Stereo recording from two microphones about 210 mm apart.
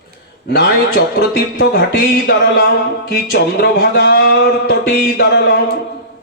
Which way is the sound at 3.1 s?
50° left (ahead or behind).